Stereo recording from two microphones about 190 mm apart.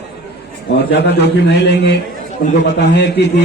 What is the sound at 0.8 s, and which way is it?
A man's voice, 60° left (ahead or behind).